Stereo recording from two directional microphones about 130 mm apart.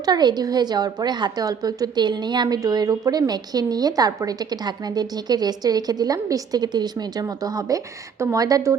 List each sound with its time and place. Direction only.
0.0 s a woman's voice: 35° right (ahead or behind)